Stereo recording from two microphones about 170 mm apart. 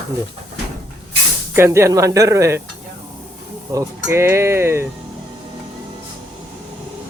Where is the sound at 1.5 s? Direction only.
15° right (ahead or behind).